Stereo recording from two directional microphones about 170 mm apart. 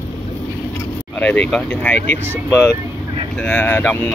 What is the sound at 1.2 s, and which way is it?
Speech, 10° left (ahead or behind).